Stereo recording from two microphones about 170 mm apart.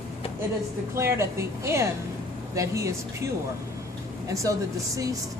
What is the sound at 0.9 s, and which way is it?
A woman's voice, 15° right (ahead or behind).